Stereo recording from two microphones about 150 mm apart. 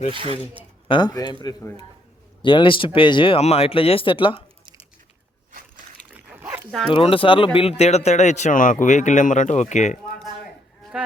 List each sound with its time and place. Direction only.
0.1 s speech: 35° right (ahead or behind)
0.9 s a man's voice: 30° left (ahead or behind)
6.1 s dog: 10° right (ahead or behind)
6.7 s speech: 5° left (ahead or behind)
6.9 s speech: 35° left (ahead or behind); by 10.2 s 55° left (ahead or behind)
10.9 s a sound: 5° right (ahead or behind)